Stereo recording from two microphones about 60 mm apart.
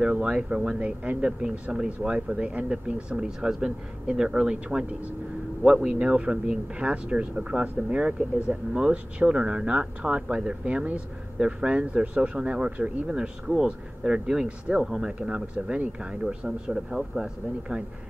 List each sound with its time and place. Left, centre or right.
0.0 s speech: centre